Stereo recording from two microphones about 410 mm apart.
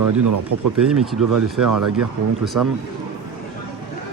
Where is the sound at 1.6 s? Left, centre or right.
Right.